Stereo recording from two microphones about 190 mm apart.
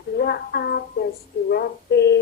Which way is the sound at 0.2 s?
55° left (ahead or behind).